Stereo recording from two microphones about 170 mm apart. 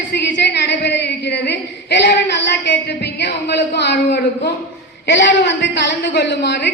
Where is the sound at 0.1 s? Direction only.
90° left.